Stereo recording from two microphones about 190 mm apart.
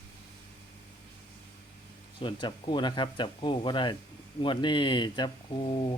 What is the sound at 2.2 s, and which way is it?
A man's voice, 25° left (ahead or behind).